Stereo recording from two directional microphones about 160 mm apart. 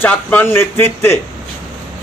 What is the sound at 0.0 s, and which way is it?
Speech, 10° left (ahead or behind).